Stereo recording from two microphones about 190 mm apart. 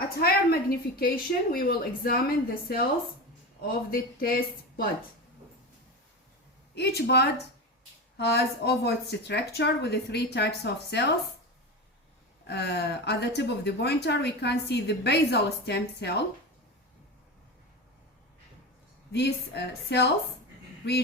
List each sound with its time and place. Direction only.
0.2 s a woman's voice: 55° left (ahead or behind)
6.7 s a woman's voice: 60° left (ahead or behind)
12.5 s a woman's voice: 60° left (ahead or behind)
19.1 s a woman's voice: 60° left (ahead or behind)